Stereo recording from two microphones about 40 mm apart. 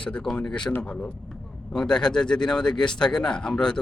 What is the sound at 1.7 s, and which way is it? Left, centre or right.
Speech, centre.